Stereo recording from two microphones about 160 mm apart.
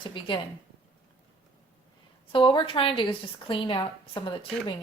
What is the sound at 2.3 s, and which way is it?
A woman's voice, 30° left (ahead or behind).